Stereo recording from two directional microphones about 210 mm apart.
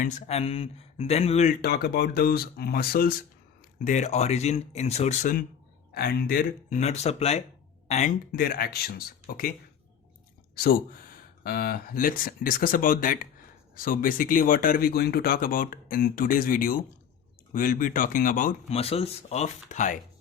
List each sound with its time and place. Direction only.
0.0 s speech: 30° left (ahead or behind)
1.6 s speech: 50° left (ahead or behind)